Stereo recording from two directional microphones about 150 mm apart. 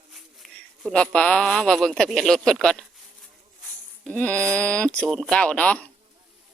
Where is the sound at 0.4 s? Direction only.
Centre (ahead or behind).